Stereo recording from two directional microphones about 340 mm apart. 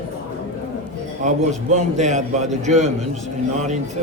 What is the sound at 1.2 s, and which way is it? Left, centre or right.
A man's voice, right.